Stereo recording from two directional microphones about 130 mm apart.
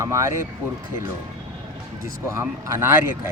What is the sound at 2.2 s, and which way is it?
Speech, 20° right (ahead or behind).